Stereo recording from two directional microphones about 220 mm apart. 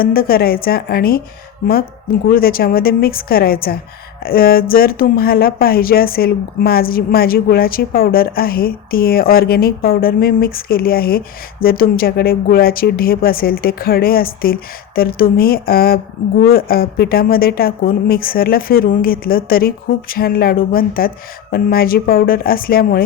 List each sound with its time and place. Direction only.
0.0 s speech: 40° left (ahead or behind)
2.2 s a woman's voice: 40° left (ahead or behind)